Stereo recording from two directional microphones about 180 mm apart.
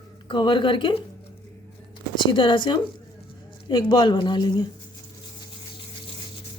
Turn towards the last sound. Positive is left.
turn(degrees=25)  # may be behind; listen again after turning